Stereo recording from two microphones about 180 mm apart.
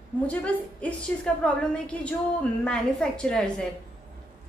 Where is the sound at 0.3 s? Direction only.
10° left (ahead or behind).